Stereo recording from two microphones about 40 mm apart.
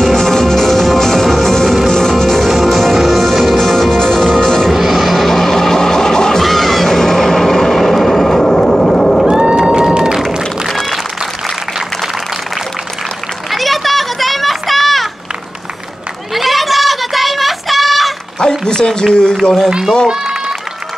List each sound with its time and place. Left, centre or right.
0.0 s music: centre
4.7 s music: centre
6.4 s a sound: centre
9.3 s run: right
9.9 s a sound: centre
10.7 s music: centre
13.5 s children playing: centre
16.3 s a sound: centre
18.7 s speech: centre
20.1 s run: centre